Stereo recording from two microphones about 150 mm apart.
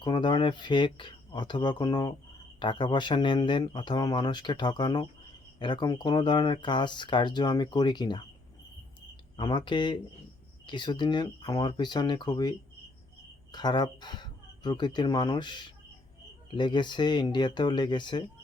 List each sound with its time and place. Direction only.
0.0 s speech: 30° left (ahead or behind)
9.4 s speech: 30° left (ahead or behind)